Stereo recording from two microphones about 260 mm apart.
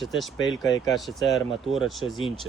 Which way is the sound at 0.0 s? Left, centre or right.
Centre.